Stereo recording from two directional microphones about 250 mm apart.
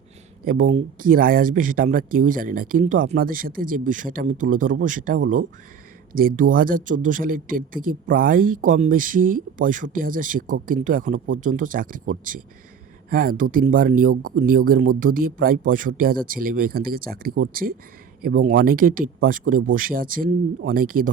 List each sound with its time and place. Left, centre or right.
0.4 s speech: right